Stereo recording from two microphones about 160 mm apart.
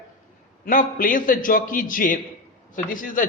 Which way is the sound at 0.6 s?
60° left (ahead or behind).